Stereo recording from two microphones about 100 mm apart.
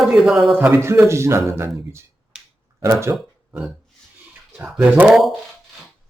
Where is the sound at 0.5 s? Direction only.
20° right (ahead or behind).